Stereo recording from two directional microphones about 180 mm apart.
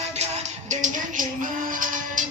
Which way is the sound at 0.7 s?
45° right (ahead or behind).